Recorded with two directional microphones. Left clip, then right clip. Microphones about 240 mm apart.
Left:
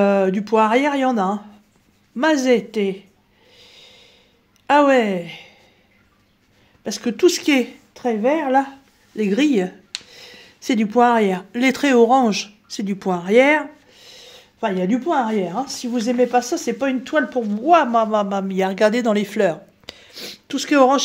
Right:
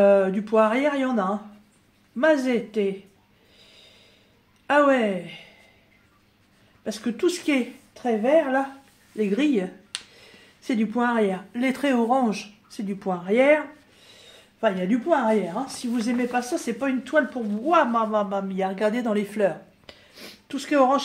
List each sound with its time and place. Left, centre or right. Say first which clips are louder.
0.0 s speech: left 1 dB; left
4.6 s speech: left 5 dB; left
6.8 s speech: left 8 dB; left